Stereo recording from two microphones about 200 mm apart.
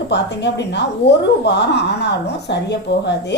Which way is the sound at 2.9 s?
60° left (ahead or behind).